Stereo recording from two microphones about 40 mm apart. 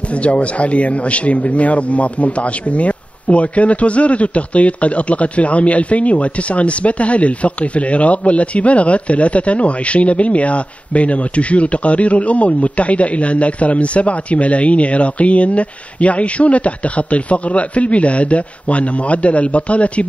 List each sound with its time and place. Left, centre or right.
0.2 s speech: left